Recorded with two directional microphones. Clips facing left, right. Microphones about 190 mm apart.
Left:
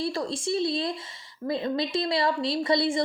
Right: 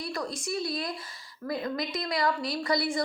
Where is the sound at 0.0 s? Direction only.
25° left (ahead or behind).